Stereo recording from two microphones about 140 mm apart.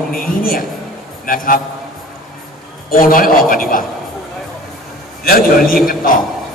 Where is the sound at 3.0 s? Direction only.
90° left.